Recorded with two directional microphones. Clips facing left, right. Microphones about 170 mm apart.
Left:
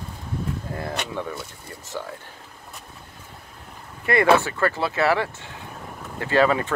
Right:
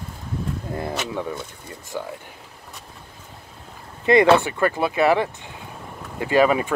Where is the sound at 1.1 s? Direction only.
15° right (ahead or behind).